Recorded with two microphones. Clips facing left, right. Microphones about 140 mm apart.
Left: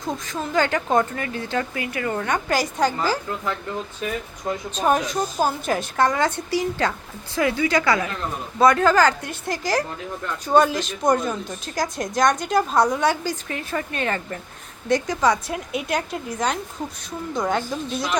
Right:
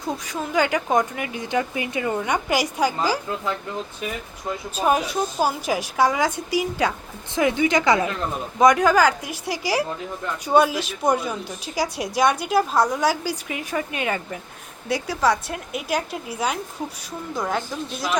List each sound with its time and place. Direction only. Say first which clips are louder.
0.0 s a woman's voice: even; 10° right (ahead or behind)
4.7 s a woman's voice: even; 10° right (ahead or behind)